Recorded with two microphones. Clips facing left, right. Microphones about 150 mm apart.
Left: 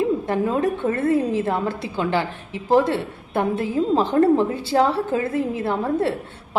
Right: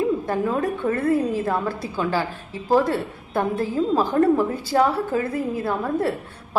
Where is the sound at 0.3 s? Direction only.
25° left (ahead or behind).